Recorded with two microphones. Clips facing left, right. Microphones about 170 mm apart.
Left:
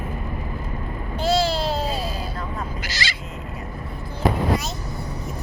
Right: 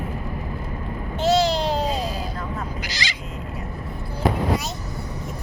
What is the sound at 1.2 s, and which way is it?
Babbling, 20° right (ahead or behind).